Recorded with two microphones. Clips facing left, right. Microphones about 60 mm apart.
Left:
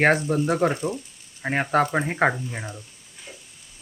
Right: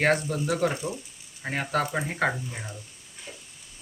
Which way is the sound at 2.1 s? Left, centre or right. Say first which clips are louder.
Left 5 dB; left.